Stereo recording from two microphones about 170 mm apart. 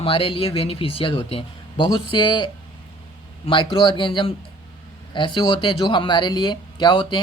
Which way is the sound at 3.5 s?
30° left (ahead or behind).